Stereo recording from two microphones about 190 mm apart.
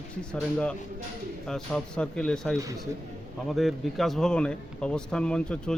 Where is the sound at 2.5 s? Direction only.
15° right (ahead or behind).